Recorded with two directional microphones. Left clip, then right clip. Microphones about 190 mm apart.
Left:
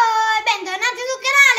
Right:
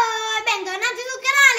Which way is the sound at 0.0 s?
25° left (ahead or behind).